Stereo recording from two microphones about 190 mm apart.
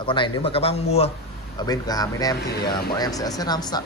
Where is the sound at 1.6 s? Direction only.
20° left (ahead or behind).